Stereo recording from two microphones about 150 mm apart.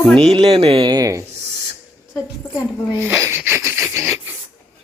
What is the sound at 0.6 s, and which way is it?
Speech, 40° right (ahead or behind).